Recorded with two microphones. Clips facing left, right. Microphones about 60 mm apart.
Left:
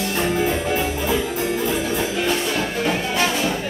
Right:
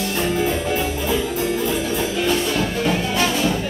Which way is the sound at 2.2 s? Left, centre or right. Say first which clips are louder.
Right 2 dB; left.